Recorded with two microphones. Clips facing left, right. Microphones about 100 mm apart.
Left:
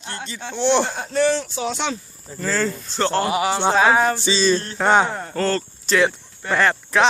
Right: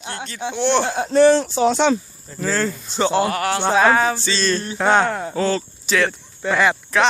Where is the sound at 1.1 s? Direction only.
35° right (ahead or behind).